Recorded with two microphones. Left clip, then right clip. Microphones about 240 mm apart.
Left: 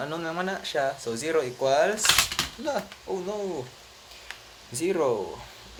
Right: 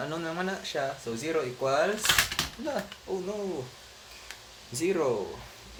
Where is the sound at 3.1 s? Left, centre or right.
Left.